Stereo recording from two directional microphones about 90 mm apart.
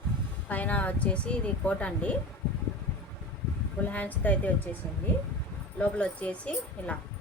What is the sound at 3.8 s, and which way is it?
Speech, 20° left (ahead or behind).